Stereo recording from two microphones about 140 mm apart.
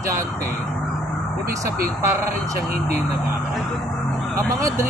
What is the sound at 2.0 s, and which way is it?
Speech, 20° right (ahead or behind).